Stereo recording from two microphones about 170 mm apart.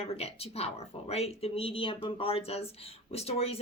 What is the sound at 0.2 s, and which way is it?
Speech, 35° left (ahead or behind).